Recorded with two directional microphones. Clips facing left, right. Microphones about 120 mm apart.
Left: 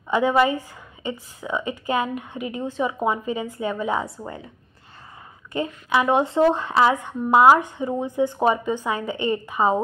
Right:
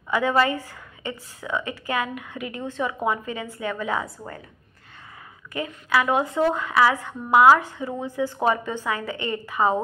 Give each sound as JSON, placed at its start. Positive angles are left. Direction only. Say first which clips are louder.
{"t": 0.1, "sound": "speech", "louder": "left 2 dB", "side_deg": 15}
{"t": 5.5, "sound": "speech", "louder": "left 2 dB", "side_deg": 25}